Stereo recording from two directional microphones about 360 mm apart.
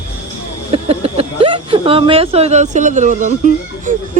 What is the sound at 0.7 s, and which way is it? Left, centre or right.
Speech, centre.